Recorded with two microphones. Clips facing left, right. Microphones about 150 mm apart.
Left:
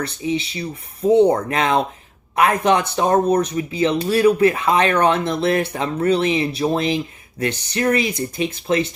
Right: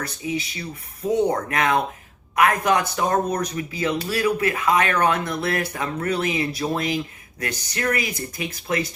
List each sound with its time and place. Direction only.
0.0 s speech: 25° left (ahead or behind)